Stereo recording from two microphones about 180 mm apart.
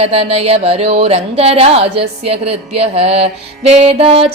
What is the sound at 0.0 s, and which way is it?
Speech, 35° right (ahead or behind).